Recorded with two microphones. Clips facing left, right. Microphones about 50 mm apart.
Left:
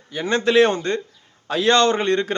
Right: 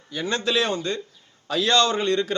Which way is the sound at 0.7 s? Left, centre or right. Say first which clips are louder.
Left 4 dB; left.